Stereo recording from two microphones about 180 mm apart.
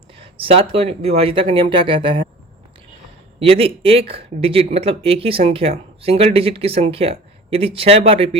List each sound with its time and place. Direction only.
0.2 s speech: 30° right (ahead or behind)
3.4 s speech: 30° right (ahead or behind)